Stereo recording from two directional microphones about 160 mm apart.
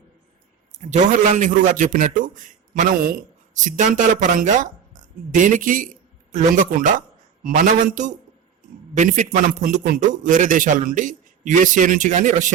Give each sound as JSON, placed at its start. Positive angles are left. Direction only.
{"t": 0.7, "sound": "a man's voice", "side_deg": -45}